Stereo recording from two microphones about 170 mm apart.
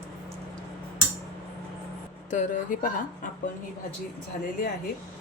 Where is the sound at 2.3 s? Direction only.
50° left (ahead or behind).